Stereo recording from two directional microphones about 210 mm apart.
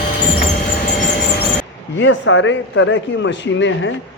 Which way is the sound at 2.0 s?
60° left (ahead or behind).